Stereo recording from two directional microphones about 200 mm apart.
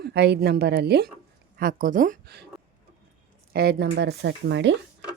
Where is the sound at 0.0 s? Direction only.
55° right (ahead or behind).